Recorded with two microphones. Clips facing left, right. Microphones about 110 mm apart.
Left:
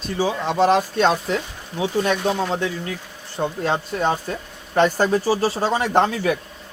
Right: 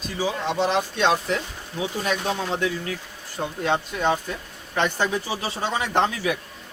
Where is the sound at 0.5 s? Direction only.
45° left (ahead or behind).